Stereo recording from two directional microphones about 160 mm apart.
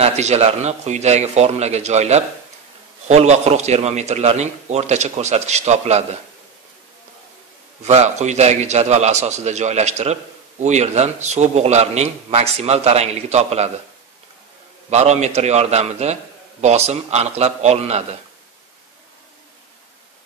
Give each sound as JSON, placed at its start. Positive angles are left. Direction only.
{"t": 0.0, "sound": "a man's voice", "side_deg": -45}
{"t": 7.8, "sound": "a man's voice", "side_deg": -45}
{"t": 14.9, "sound": "a man's voice", "side_deg": -45}